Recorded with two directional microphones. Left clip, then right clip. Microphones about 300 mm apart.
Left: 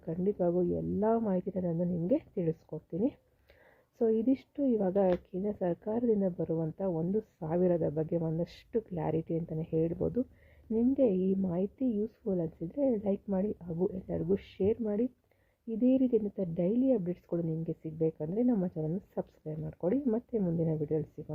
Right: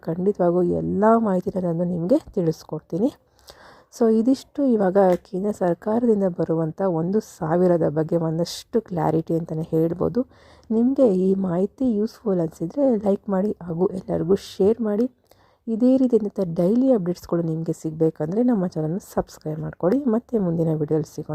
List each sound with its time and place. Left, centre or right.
0.0 s speech: centre